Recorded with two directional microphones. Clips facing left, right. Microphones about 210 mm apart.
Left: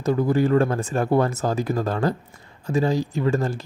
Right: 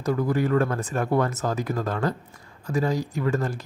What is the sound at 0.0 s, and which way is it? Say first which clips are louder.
Speech: left 4 dB; 25° left (ahead or behind).